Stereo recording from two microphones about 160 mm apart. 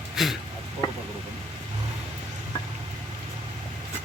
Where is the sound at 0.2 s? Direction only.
Centre (ahead or behind).